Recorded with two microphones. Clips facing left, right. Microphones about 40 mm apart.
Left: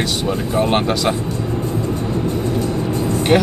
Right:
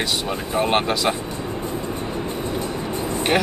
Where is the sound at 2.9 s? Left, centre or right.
Right.